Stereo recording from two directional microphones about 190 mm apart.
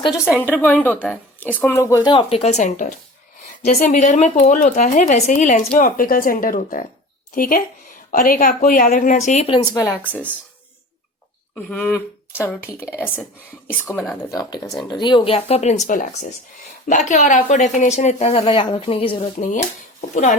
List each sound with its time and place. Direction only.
0.4 s speech: 10° left (ahead or behind); by 9.6 s 35° left (ahead or behind)
9.7 s speech: 15° left (ahead or behind)
11.5 s speech: 10° left (ahead or behind)
13.8 s speech: 5° left (ahead or behind)
14.3 s speech: 20° left (ahead or behind); by 20.3 s 40° left (ahead or behind)